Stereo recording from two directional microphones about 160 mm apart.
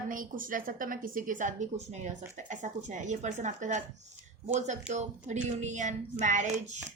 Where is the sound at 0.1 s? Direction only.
60° right (ahead or behind).